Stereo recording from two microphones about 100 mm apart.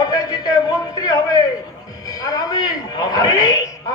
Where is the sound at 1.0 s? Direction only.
40° left (ahead or behind).